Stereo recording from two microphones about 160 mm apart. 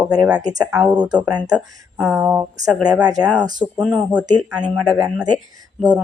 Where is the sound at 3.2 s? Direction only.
25° right (ahead or behind).